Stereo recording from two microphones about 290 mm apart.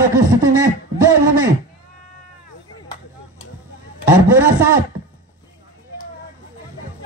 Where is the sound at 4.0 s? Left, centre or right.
Centre.